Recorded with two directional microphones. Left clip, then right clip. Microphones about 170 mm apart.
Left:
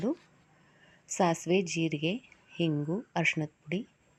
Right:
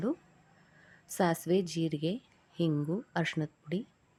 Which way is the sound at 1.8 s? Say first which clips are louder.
Left 2 dB; 45° right (ahead or behind).